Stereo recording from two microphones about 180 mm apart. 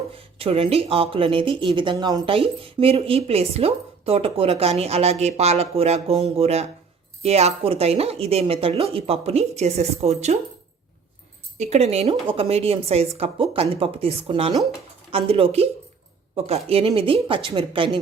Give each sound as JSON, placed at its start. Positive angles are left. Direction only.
{"t": 0.1, "sound": "speech", "side_deg": -30}
{"t": 11.5, "sound": "speech", "side_deg": -40}